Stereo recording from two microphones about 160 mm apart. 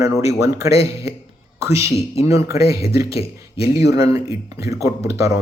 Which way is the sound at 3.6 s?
90° left.